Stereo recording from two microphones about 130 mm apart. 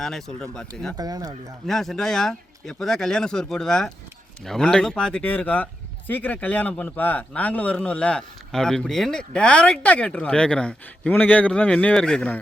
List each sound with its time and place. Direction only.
0.0 s speech: 5° left (ahead or behind)
0.9 s speech: 30° right (ahead or behind)
1.6 s speech: centre (ahead or behind)